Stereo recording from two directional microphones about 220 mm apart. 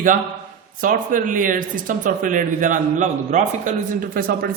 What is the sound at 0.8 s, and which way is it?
A man's voice, 35° right (ahead or behind).